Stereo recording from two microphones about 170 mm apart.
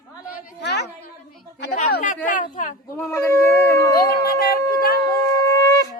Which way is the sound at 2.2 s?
50° left (ahead or behind).